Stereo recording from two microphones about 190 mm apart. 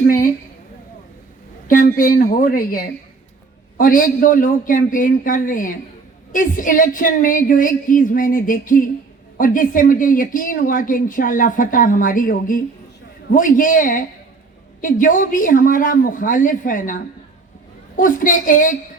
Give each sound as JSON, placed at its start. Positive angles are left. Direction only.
{"t": 1.6, "sound": "speech", "side_deg": 45}